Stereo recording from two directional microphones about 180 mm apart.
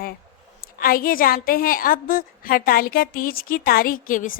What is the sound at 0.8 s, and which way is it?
A woman's voice, 55° left (ahead or behind).